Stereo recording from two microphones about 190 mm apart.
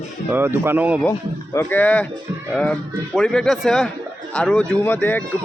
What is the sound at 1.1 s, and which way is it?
Speech, 15° left (ahead or behind).